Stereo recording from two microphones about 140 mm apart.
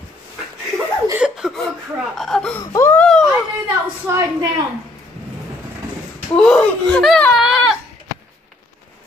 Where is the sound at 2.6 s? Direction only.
20° left (ahead or behind).